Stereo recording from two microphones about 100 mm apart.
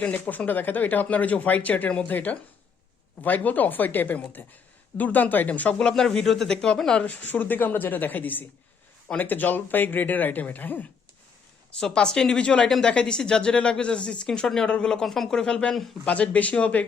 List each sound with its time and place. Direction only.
0.0 s a woman's voice: 15° left (ahead or behind)